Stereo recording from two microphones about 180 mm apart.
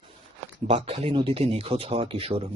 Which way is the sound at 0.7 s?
30° right (ahead or behind).